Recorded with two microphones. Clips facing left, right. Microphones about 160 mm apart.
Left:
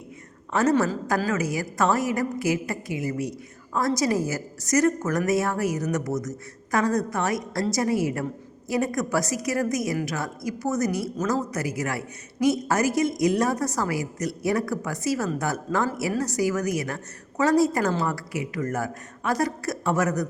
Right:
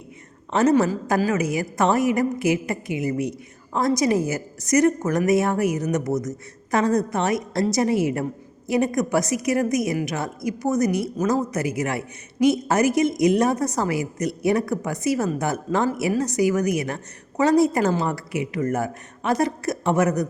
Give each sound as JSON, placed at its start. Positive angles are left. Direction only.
{"t": 0.5, "sound": "a woman's voice", "side_deg": -20}